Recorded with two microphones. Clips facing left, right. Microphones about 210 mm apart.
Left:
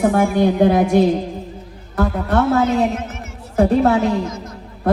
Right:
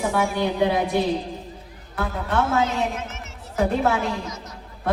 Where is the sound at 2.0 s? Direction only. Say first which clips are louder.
Left 7 dB; 40° left (ahead or behind).